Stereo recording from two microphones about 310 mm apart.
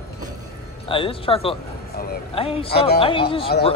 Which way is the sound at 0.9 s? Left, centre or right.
Centre.